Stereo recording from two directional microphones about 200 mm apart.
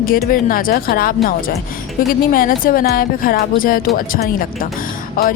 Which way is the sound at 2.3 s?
45° left (ahead or behind).